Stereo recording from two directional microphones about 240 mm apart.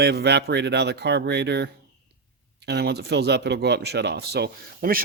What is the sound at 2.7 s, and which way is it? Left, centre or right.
Speech, right.